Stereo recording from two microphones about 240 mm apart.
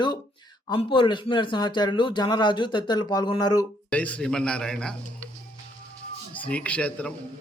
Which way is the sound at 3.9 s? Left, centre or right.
Centre.